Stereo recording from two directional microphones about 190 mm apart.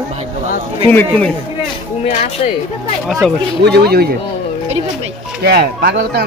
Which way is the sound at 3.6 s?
55° right (ahead or behind).